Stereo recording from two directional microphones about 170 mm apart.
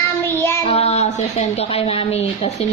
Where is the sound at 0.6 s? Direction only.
35° left (ahead or behind).